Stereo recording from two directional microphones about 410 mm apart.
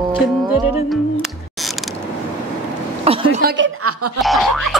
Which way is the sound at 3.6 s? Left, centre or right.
Right.